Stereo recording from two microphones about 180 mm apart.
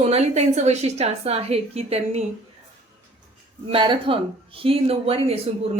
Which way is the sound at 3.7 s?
30° right (ahead or behind).